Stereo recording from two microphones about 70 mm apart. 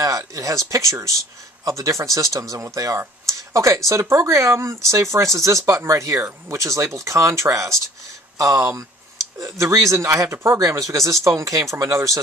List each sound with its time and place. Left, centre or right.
0.0 s speech: right
10.3 s speech: right
10.6 s speech: right